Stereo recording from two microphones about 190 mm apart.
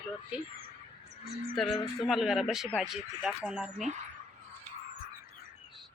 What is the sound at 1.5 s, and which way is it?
Speech, centre (ahead or behind).